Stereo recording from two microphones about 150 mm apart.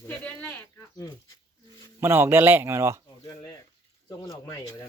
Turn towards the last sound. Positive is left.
turn(degrees=35)  # may be behind; listen again after turning